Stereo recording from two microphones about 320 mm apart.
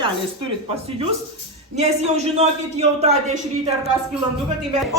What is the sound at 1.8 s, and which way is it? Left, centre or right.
A man's voice, right.